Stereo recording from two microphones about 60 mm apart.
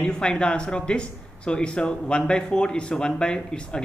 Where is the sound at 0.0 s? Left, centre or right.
Centre.